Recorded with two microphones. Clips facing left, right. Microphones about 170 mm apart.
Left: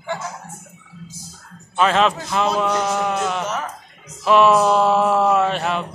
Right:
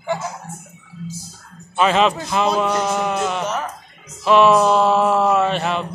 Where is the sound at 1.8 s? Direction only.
5° right (ahead or behind).